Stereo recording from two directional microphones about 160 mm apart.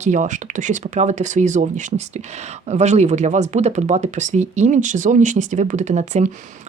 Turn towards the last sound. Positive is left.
turn(degrees=-45)  # may be behind; listen again after turning